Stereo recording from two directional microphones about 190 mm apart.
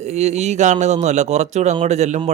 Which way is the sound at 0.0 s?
35° right (ahead or behind).